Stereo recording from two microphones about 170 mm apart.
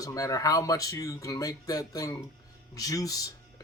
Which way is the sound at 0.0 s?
20° left (ahead or behind).